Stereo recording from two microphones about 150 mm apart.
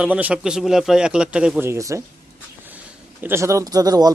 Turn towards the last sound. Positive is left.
turn(degrees=-25)  # may be behind; listen again after turning